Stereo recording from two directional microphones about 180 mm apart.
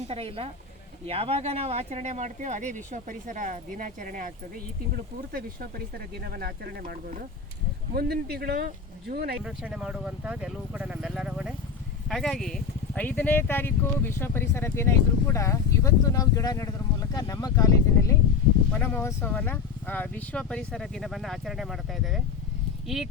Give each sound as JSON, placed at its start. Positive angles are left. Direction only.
{"t": 0.1, "sound": "speech", "side_deg": -30}
{"t": 5.3, "sound": "speech", "side_deg": -55}
{"t": 9.4, "sound": "speech", "side_deg": -5}